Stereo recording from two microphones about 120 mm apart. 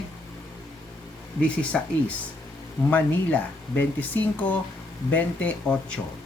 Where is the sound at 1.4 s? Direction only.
10° left (ahead or behind).